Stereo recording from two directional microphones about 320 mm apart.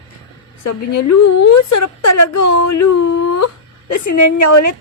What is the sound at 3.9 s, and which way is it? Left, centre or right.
Speech, left.